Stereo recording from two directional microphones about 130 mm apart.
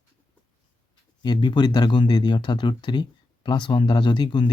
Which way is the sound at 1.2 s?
35° left (ahead or behind).